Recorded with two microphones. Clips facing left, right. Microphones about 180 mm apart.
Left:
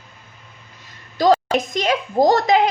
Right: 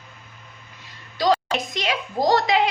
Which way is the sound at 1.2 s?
45° left (ahead or behind).